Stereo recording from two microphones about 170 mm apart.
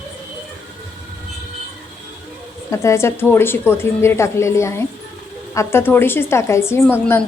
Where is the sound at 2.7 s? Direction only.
15° left (ahead or behind).